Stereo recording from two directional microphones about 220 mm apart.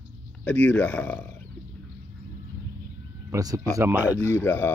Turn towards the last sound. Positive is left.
turn(degrees=10)  # may be behind; listen again after turning